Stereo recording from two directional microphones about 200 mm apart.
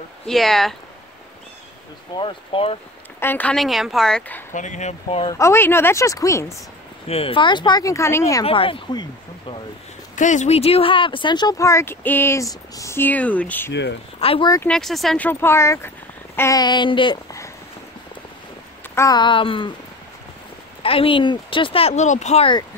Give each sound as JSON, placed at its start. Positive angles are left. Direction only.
{"t": 0.3, "sound": "a woman's voice", "side_deg": 0}
{"t": 2.1, "sound": "speech", "side_deg": 25}
{"t": 3.2, "sound": "a woman's voice", "side_deg": 10}
{"t": 4.5, "sound": "speech", "side_deg": 40}
{"t": 5.2, "sound": "speech", "side_deg": 15}
{"t": 7.1, "sound": "speech", "side_deg": 30}
{"t": 8.5, "sound": "speech", "side_deg": 25}
{"t": 10.1, "sound": "speech", "side_deg": 40}
{"t": 14.2, "sound": "speech", "side_deg": 25}
{"t": 14.6, "sound": "speech", "side_deg": 5}
{"t": 18.9, "sound": "speech", "side_deg": 20}
{"t": 20.8, "sound": "speech", "side_deg": 25}